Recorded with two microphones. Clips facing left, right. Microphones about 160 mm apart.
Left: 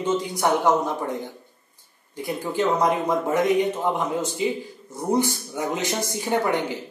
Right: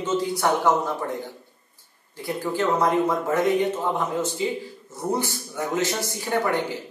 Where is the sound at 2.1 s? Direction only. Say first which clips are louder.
Left 1 dB; 15° left (ahead or behind).